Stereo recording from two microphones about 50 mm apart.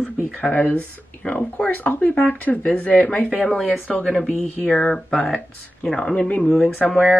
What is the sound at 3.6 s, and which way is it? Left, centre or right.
Speech, left.